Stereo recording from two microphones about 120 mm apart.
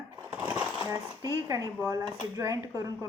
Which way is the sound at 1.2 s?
30° right (ahead or behind).